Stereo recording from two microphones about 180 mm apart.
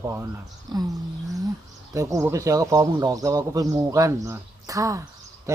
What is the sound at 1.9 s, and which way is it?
Speech, 15° right (ahead or behind).